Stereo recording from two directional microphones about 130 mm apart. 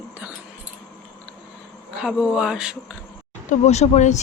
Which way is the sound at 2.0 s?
5° right (ahead or behind).